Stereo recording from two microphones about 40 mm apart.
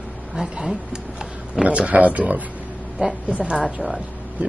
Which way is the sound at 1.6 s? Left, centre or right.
Right.